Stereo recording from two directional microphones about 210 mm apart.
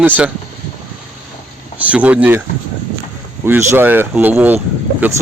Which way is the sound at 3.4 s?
10° right (ahead or behind).